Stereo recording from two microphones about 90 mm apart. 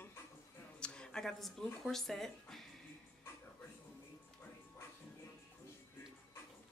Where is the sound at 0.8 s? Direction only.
10° left (ahead or behind).